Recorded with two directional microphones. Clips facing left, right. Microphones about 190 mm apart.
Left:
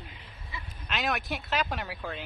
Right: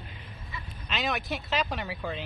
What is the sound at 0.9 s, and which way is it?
Speech, centre (ahead or behind).